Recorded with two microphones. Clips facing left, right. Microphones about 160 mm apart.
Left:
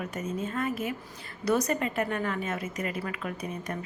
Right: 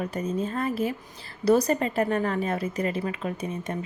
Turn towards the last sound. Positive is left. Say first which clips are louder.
# right 4 dB
turn(degrees=-25)  # may be behind; listen again after turning